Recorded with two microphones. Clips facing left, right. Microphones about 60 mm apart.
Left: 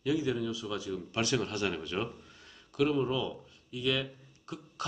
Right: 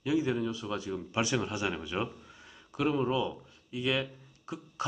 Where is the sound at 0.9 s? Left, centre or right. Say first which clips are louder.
Even; centre.